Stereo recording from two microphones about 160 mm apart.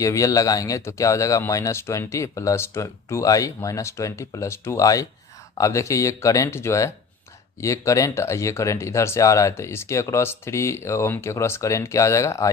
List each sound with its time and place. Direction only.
0.0 s speech: 20° left (ahead or behind)